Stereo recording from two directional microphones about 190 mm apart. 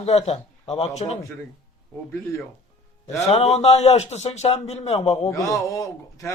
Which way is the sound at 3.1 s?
35° left (ahead or behind).